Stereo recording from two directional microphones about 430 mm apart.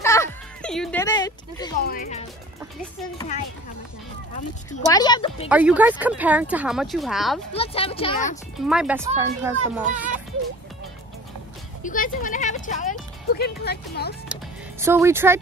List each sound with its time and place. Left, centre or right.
0.0 s music: centre
1.8 s speech: centre
4.4 s speech: centre
5.5 s speech: centre
7.5 s speech: centre
8.6 s speech: centre
11.8 s speech: centre
14.3 s speech: centre